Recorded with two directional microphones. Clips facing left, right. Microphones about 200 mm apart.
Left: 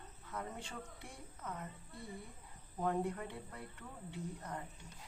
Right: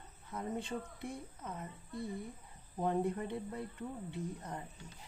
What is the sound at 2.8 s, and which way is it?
A woman's voice, 20° right (ahead or behind).